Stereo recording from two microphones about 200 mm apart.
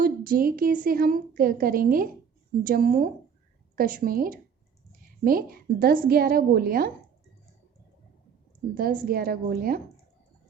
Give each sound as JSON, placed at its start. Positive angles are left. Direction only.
{"t": 0.0, "sound": "a woman's voice", "side_deg": -45}
{"t": 8.7, "sound": "a woman's voice", "side_deg": -45}